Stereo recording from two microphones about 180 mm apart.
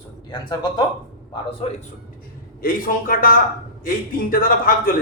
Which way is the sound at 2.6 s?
50° left (ahead or behind).